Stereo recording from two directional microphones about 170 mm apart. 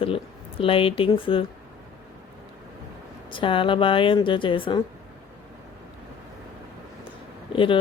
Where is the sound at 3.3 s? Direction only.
30° left (ahead or behind).